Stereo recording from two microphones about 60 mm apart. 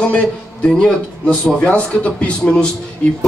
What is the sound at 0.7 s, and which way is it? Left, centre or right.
Speech, centre.